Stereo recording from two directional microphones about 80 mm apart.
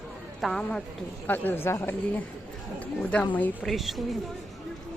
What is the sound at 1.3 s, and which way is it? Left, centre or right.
Speech, left.